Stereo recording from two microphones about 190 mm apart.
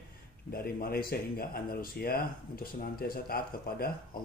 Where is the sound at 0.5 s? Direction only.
55° left (ahead or behind).